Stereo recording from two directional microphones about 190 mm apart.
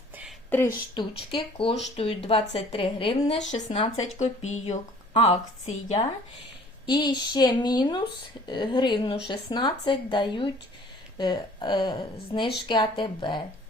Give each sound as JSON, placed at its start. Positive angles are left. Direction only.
{"t": 0.5, "sound": "speech", "side_deg": 10}
{"t": 0.9, "sound": "a woman's voice", "side_deg": 25}